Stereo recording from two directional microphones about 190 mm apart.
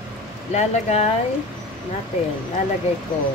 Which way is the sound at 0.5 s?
35° left (ahead or behind).